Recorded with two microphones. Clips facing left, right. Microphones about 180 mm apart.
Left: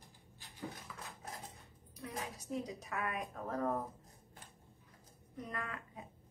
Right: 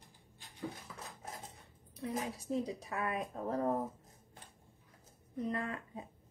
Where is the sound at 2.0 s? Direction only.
30° right (ahead or behind).